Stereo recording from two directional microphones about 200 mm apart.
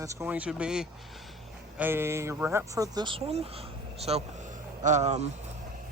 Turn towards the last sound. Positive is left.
turn(degrees=-35)  # may be behind; listen again after turning